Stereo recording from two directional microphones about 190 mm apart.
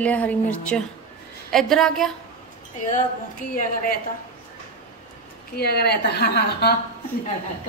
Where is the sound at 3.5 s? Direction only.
50° left (ahead or behind).